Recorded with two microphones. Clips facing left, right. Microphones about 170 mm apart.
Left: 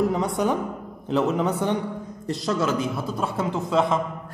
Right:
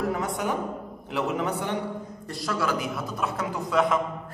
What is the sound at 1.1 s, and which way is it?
A man's voice, 20° left (ahead or behind).